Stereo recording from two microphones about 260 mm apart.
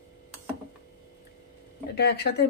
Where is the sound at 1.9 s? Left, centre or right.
Left.